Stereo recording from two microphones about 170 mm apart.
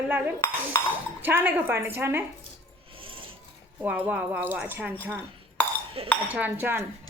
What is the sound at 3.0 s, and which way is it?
Sewing machine, 30° right (ahead or behind).